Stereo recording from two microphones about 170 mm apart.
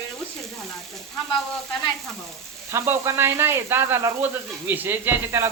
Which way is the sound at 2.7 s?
15° right (ahead or behind).